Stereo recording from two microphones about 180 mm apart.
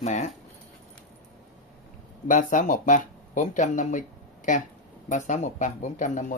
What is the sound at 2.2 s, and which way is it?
Speech, 45° left (ahead or behind).